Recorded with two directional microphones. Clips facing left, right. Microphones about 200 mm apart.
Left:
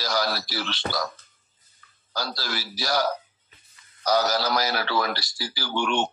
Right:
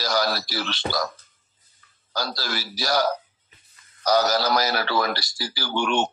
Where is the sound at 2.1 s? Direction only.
40° right (ahead or behind).